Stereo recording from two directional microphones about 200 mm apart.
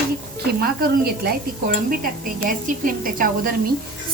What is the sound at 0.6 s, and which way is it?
A woman's voice, 50° right (ahead or behind).